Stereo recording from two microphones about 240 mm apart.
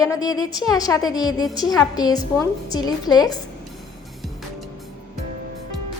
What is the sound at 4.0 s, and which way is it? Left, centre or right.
Music, centre.